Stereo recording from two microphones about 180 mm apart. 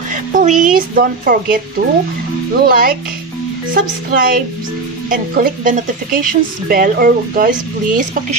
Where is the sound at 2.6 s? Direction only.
55° right (ahead or behind).